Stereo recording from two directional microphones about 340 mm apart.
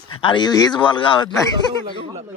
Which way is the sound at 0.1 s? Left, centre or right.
Centre.